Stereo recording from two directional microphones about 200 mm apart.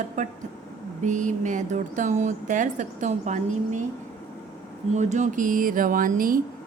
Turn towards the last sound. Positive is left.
turn(degrees=-45)  # may be behind; listen again after turning